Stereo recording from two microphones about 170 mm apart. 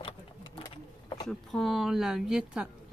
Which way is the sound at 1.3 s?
Centre (ahead or behind).